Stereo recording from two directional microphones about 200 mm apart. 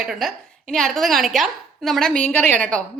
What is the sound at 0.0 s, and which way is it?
A woman's voice, centre (ahead or behind).